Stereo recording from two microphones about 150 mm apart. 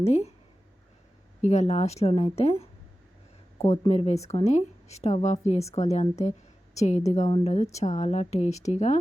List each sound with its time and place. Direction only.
0.0 s a woman's voice: 45° left (ahead or behind)
1.4 s a woman's voice: 50° left (ahead or behind)
3.7 s a woman's voice: 45° left (ahead or behind)